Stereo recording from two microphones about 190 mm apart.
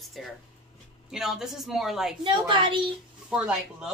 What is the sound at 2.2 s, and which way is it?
Speech, 25° right (ahead or behind).